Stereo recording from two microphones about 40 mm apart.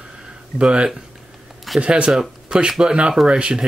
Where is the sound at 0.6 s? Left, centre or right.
Right.